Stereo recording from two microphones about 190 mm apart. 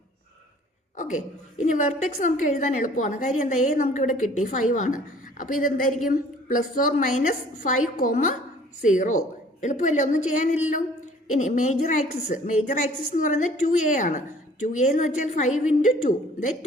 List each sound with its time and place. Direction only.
0.9 s a woman's voice: 40° left (ahead or behind)